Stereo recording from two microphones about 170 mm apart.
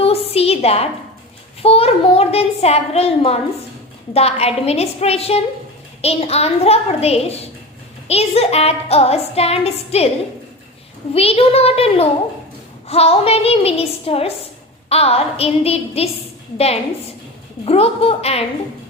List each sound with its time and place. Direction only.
0.0 s a sound: 35° left (ahead or behind)
1.6 s a child's voice: 35° left (ahead or behind)
11.1 s a child's voice: 35° left (ahead or behind)